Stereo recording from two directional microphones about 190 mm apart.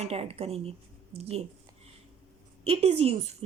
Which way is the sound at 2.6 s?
35° right (ahead or behind).